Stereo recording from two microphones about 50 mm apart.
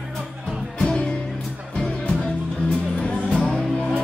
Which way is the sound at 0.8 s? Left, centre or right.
Left.